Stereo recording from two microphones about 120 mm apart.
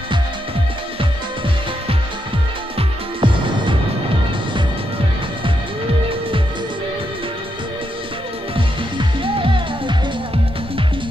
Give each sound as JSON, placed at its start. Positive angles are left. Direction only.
{"t": 3.2, "sound": "music", "side_deg": -45}
{"t": 8.5, "sound": "music", "side_deg": -45}